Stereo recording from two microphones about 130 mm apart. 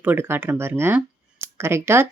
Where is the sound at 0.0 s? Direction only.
15° right (ahead or behind).